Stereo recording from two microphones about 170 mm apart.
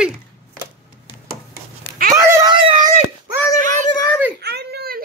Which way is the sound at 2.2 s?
15° right (ahead or behind).